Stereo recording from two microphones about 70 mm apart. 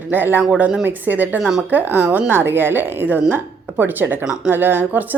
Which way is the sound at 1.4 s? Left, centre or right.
Centre.